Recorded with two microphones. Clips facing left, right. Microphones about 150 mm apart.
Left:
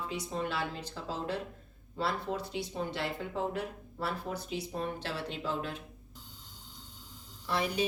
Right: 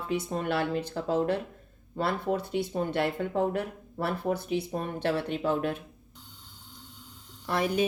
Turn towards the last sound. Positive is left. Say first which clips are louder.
# right 5 dB
turn(degrees=-50)  # may be behind; listen again after turning